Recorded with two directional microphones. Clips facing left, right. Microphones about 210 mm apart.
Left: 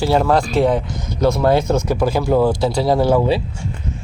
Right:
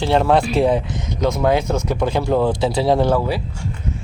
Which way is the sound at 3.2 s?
20° left (ahead or behind).